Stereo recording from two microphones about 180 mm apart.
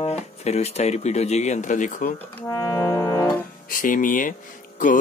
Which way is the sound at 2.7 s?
15° left (ahead or behind).